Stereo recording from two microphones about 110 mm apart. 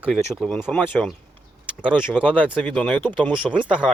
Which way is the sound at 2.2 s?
15° left (ahead or behind).